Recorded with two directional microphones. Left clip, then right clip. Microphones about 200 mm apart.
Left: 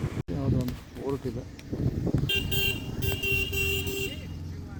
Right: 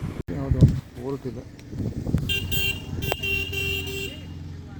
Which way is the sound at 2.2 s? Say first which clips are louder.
Right 2 dB; 40° left (ahead or behind).